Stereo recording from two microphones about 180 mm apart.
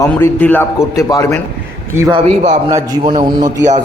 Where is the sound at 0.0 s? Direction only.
10° left (ahead or behind).